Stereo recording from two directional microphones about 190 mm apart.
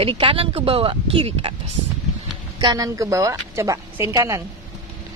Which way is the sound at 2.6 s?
20° right (ahead or behind).